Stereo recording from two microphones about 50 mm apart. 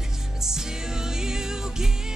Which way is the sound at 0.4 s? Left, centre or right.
Centre.